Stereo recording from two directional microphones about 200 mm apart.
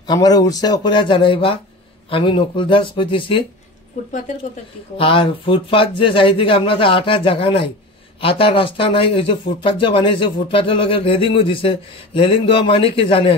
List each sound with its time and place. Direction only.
0.0 s speech: 20° left (ahead or behind)
4.9 s speech: 25° left (ahead or behind)